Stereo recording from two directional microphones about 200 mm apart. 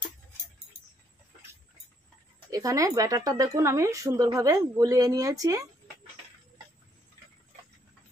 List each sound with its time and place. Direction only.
2.5 s a woman's voice: 15° right (ahead or behind)